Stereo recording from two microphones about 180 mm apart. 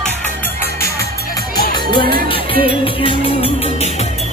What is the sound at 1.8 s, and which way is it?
Music, 25° left (ahead or behind).